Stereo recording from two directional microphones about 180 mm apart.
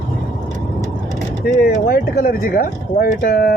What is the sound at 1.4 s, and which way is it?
Speech, 55° left (ahead or behind).